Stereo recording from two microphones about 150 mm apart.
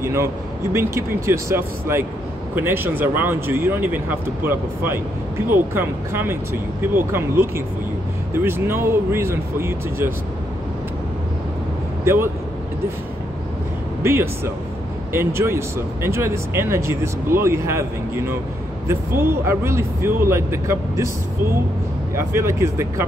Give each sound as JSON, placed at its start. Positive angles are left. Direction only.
{"t": 0.0, "sound": "speech", "side_deg": -20}
{"t": 12.0, "sound": "speech", "side_deg": -15}
{"t": 14.0, "sound": "speech", "side_deg": -15}